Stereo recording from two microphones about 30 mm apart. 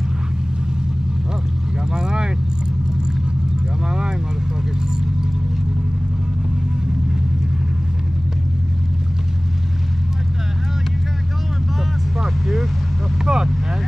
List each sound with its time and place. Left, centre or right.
2.0 s vehicle: right
13.2 s vehicle: right